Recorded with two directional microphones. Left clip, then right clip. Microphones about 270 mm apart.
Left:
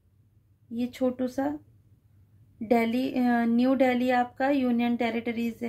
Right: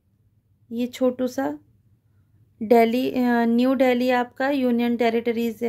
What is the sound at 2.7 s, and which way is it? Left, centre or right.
A woman's voice, right.